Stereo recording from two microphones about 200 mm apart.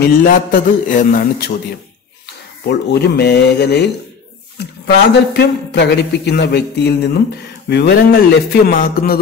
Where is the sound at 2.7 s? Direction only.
55° left (ahead or behind).